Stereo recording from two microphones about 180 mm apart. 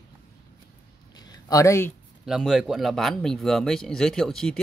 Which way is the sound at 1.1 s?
20° left (ahead or behind).